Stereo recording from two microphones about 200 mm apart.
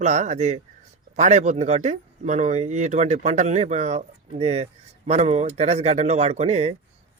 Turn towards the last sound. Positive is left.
turn(degrees=-35)  # may be behind; listen again after turning